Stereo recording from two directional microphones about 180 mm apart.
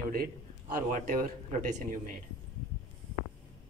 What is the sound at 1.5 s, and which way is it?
Speech, 45° right (ahead or behind).